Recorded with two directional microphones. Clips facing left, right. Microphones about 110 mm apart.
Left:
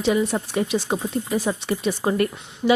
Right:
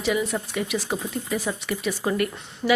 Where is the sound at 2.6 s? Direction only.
Centre (ahead or behind).